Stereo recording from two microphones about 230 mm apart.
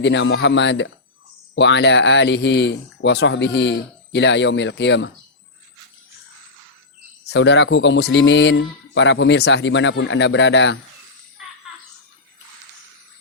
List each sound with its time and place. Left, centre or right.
0.0 s speech: left
7.3 s speech: left